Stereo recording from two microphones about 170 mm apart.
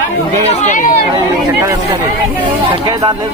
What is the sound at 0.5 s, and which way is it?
Speech, 45° left (ahead or behind).